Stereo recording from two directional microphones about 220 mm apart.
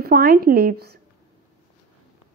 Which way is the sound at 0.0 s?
45° right (ahead or behind).